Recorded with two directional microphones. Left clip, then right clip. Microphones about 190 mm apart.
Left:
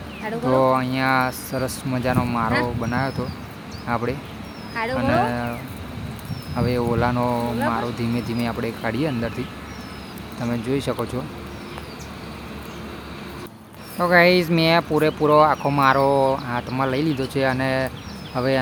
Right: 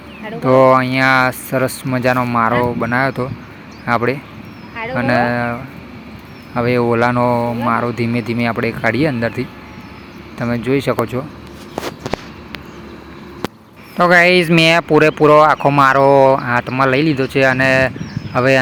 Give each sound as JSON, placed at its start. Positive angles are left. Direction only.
{"t": 0.4, "sound": "speech", "side_deg": -20}
{"t": 4.7, "sound": "music", "side_deg": -5}
{"t": 4.9, "sound": "speech", "side_deg": -20}
{"t": 6.6, "sound": "speech", "side_deg": -25}
{"t": 10.4, "sound": "speech", "side_deg": -20}
{"t": 14.0, "sound": "speech", "side_deg": -30}